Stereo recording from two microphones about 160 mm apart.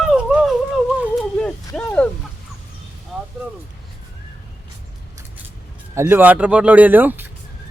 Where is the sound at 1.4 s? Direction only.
5° left (ahead or behind).